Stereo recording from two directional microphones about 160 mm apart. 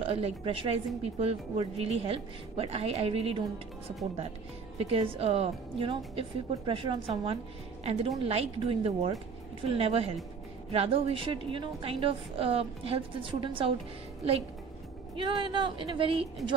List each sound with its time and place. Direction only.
0.0 s a woman's voice: 40° right (ahead or behind)
4.7 s a woman's voice: 35° right (ahead or behind)
15.1 s a woman's voice: 30° right (ahead or behind)